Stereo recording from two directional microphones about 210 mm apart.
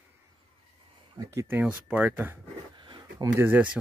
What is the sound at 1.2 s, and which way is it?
Speech, 15° right (ahead or behind).